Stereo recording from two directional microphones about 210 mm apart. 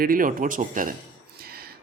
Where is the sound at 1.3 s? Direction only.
45° right (ahead or behind).